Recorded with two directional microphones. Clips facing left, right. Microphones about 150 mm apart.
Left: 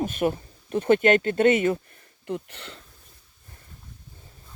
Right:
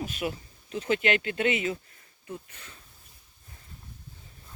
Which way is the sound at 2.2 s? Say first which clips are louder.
Left 9 dB; 75° left (ahead or behind).